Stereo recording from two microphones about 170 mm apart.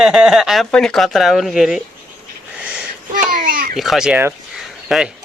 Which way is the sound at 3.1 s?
55° right (ahead or behind).